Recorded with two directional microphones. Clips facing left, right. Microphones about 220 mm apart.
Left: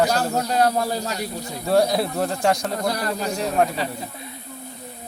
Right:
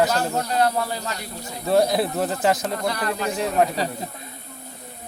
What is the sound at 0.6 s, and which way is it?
Speech, 40° left (ahead or behind).